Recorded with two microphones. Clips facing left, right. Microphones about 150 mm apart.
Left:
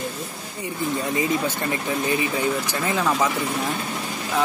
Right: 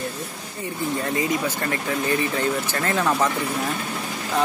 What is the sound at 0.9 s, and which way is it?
Speech, 20° left (ahead or behind).